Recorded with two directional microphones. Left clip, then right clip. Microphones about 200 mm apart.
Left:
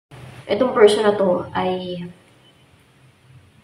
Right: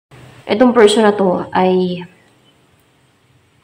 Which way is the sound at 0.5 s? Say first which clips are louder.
Right 4 dB; 35° right (ahead or behind).